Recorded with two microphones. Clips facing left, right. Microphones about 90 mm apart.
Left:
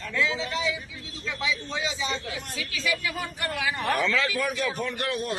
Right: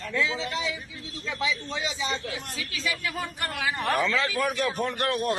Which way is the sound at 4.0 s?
30° right (ahead or behind).